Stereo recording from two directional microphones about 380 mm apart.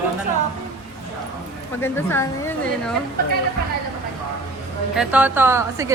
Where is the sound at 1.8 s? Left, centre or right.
Centre.